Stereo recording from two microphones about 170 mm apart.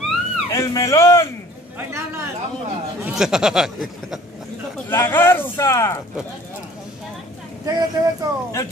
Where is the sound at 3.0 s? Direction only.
5° right (ahead or behind).